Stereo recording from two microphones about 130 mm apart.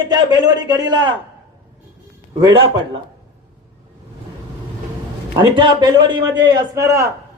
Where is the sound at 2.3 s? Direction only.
35° right (ahead or behind).